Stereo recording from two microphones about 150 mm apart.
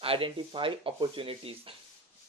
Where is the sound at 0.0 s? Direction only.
35° right (ahead or behind).